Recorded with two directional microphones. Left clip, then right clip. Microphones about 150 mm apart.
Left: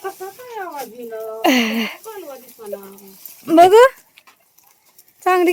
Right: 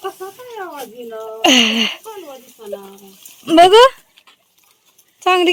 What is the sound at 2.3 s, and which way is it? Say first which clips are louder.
Speech: right 1 dB; 30° right (ahead or behind).